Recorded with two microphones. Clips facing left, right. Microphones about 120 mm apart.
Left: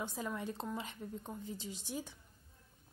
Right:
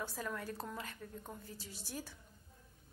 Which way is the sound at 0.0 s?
15° left (ahead or behind).